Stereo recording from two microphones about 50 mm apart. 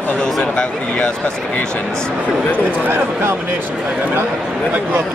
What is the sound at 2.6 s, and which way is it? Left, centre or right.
Speech, right.